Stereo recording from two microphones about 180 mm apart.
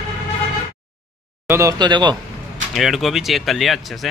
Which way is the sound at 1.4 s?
15° right (ahead or behind).